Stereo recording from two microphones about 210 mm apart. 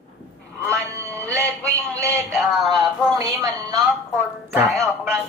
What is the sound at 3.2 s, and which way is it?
A man's voice, 15° right (ahead or behind).